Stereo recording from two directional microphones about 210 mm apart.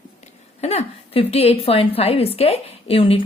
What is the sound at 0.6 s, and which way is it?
A woman's voice, 30° left (ahead or behind).